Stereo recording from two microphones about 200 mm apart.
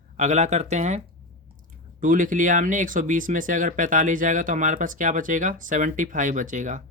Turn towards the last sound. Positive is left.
turn(degrees=-40)  # may be behind; listen again after turning